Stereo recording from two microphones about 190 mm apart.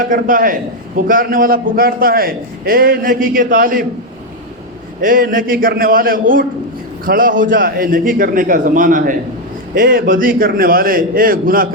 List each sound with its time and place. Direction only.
0.0 s a man's voice: 45° right (ahead or behind)
4.9 s a man's voice: 45° right (ahead or behind)